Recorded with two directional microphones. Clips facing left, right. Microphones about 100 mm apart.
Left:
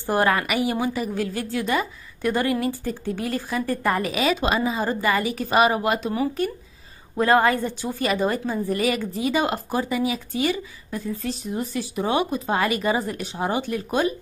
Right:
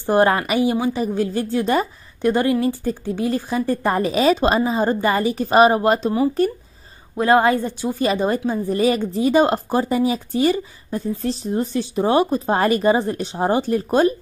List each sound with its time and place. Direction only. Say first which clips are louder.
0.0 s a woman's voice: right 5 dB; 25° right (ahead or behind)
7.2 s a woman's voice: right 3 dB; 20° right (ahead or behind); by 14.1 s 40° right (ahead or behind)